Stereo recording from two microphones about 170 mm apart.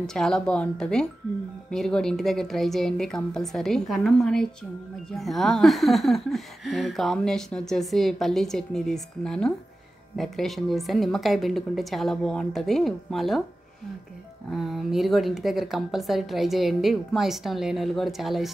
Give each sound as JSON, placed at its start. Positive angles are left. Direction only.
{"t": 0.0, "sound": "speech", "side_deg": 5}
{"t": 14.5, "sound": "speech", "side_deg": 0}